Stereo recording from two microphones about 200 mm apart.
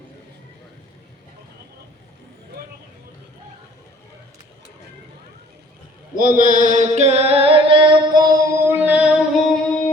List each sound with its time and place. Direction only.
6.1 s chant: 40° right (ahead or behind); by 9.7 s 5° right (ahead or behind)